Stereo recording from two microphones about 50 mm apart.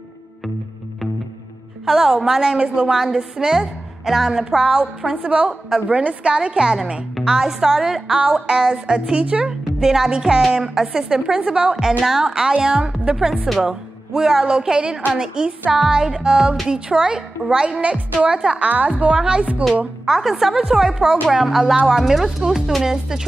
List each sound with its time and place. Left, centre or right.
1.9 s a woman's voice: centre; by 9.5 s right
9.5 s a woman's voice: centre
20.1 s a woman's voice: centre